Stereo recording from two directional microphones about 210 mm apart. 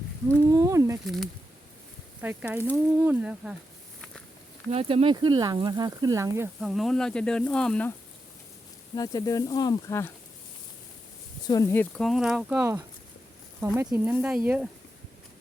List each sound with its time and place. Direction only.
0.3 s speech: 15° right (ahead or behind)
1.0 s speech: centre (ahead or behind)
4.7 s speech: 30° right (ahead or behind); by 6.5 s 15° right (ahead or behind)
6.6 s speech: centre (ahead or behind)
9.0 s speech: 15° left (ahead or behind)
11.4 s speech: 15° left (ahead or behind); by 14.7 s 5° right (ahead or behind)